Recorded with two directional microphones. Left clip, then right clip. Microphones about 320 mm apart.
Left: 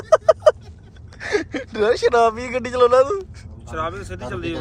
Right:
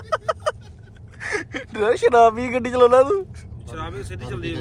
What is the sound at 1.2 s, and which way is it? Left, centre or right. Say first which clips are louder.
Gasp: left 4 dB; centre.